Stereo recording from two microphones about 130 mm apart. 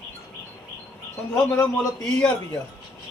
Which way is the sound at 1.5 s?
5° left (ahead or behind).